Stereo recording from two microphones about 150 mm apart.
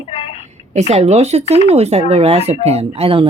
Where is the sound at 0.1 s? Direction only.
40° left (ahead or behind).